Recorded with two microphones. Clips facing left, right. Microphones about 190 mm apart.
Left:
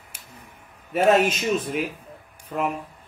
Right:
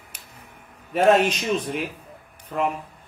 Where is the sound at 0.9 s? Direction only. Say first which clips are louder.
Right 1 dB; 5° left (ahead or behind).